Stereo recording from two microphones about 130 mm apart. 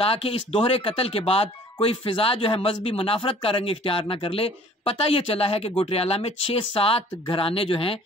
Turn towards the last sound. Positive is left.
turn(degrees=45)  # may be behind; listen again after turning